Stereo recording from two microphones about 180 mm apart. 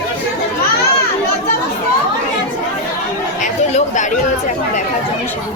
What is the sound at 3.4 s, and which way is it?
Chatter, 40° left (ahead or behind).